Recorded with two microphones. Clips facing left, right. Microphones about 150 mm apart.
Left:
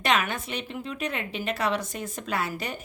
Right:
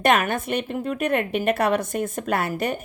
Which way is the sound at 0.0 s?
50° right (ahead or behind).